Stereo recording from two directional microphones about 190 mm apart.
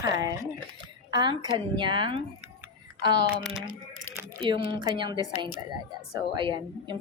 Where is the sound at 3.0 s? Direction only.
20° right (ahead or behind).